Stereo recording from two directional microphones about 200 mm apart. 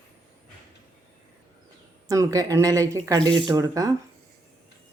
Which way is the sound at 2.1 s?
15° right (ahead or behind).